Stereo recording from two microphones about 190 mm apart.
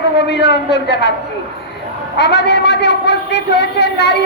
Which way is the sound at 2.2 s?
65° left (ahead or behind).